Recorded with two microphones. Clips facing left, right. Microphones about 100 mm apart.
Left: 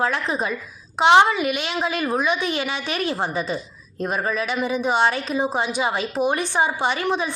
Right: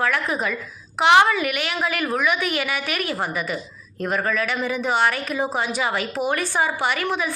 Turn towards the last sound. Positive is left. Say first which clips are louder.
# left 1 dB
turn(degrees=25)  # may be behind; listen again after turning